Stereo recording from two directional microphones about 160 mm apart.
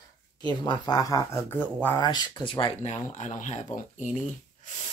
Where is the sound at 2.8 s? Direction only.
45° left (ahead or behind).